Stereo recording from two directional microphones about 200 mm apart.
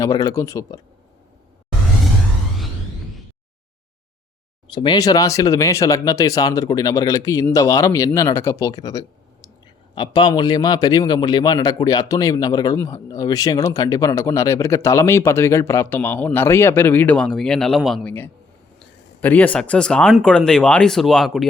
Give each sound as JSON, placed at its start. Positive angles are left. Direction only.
{"t": 0.0, "sound": "speech", "side_deg": 15}
{"t": 4.7, "sound": "a man's voice", "side_deg": 25}